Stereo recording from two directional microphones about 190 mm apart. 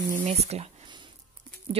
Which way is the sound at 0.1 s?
35° right (ahead or behind).